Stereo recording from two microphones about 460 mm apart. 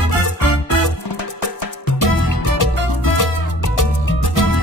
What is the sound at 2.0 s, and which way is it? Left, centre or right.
Music, left.